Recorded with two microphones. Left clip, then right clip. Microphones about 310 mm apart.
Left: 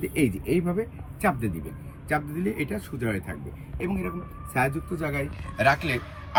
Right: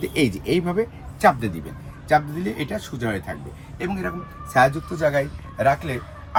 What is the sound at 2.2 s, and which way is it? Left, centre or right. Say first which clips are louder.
Speech: right 5 dB; right.